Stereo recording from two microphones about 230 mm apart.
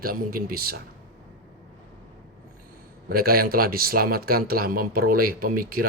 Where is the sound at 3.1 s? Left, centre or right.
Right.